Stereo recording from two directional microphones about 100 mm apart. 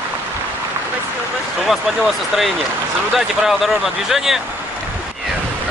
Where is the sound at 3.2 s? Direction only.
Centre (ahead or behind).